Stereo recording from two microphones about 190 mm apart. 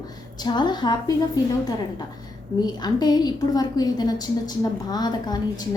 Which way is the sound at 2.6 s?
20° left (ahead or behind).